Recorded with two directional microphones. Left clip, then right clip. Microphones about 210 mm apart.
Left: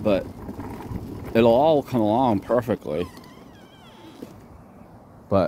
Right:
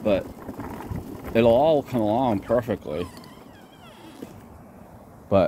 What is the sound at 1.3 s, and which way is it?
Speech, 30° left (ahead or behind).